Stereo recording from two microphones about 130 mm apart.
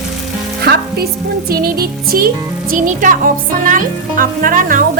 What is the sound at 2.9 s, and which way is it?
Speech, 90° right.